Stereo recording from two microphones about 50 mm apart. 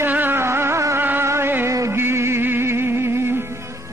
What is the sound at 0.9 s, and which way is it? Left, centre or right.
Music, right.